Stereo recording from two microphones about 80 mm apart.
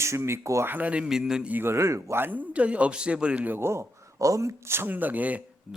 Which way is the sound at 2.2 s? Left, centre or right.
Right.